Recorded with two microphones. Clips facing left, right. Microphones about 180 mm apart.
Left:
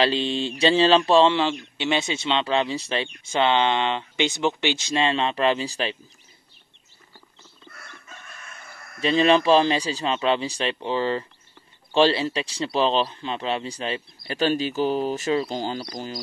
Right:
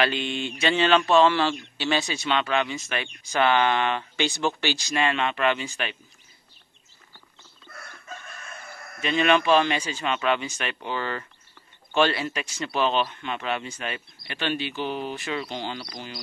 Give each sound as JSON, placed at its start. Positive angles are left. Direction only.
{"t": 0.0, "sound": "speech", "side_deg": 30}
{"t": 9.0, "sound": "speech", "side_deg": 30}